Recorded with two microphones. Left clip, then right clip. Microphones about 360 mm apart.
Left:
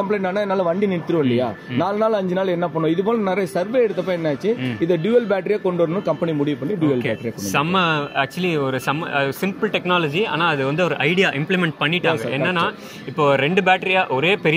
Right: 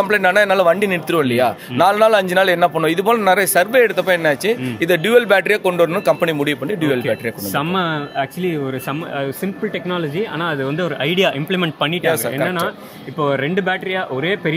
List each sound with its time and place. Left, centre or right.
0.1 s speech: right
7.5 s speech: centre